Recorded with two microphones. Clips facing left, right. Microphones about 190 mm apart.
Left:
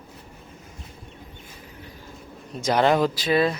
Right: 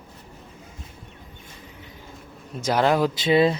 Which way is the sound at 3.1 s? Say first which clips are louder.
Right 3 dB; 25° right (ahead or behind).